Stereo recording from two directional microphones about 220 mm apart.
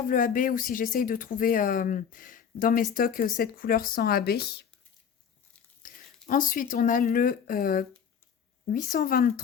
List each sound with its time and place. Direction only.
0.1 s speech: 40° left (ahead or behind)
6.2 s speech: 40° left (ahead or behind)